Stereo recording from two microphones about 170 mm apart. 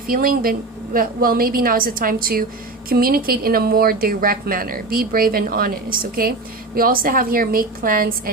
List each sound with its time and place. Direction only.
0.1 s a woman's voice: 60° right (ahead or behind)